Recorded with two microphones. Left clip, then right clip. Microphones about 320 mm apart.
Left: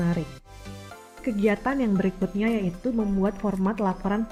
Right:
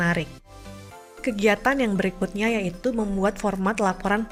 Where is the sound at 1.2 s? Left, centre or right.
Right.